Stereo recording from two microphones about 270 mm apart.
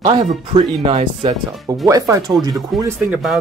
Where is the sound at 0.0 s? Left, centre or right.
Centre.